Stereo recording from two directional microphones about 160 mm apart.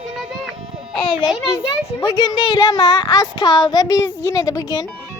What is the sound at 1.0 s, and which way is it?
Speech, 30° left (ahead or behind).